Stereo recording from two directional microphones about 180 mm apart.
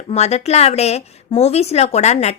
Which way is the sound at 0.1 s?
35° left (ahead or behind).